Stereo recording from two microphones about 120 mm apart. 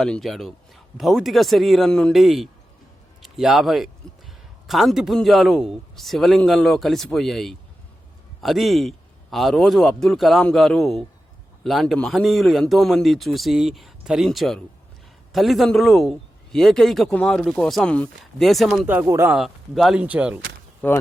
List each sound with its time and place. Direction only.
0.0 s a man's voice: centre (ahead or behind)
4.0 s a sound: 5° left (ahead or behind)
4.6 s a man's voice: centre (ahead or behind)
18.9 s speech: 20° right (ahead or behind)
19.3 s a man's voice: centre (ahead or behind)